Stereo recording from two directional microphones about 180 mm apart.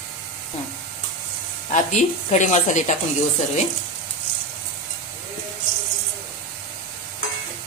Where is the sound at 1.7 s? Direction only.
45° left (ahead or behind).